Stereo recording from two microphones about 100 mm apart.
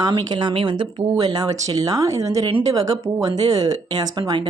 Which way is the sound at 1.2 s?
40° right (ahead or behind).